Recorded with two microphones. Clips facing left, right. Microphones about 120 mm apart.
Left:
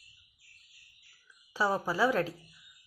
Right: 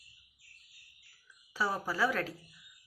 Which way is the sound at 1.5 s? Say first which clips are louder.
Left 4 dB; 20° left (ahead or behind).